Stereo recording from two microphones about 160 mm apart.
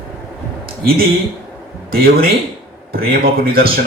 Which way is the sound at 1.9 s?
70° right (ahead or behind).